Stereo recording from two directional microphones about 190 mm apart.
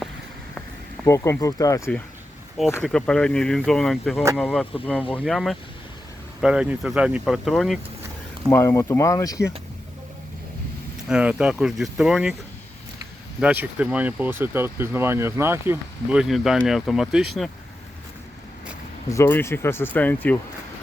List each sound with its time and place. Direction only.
1.0 s speech: 15° left (ahead or behind)
2.8 s speech: 5° left (ahead or behind)
8.4 s speech: 15° left (ahead or behind)
11.1 s speech: 5° right (ahead or behind)
13.4 s speech: 5° right (ahead or behind)
19.0 s speech: 15° left (ahead or behind)